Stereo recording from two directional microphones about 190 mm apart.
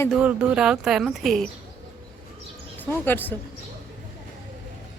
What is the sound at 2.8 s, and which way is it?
Speech, 10° left (ahead or behind).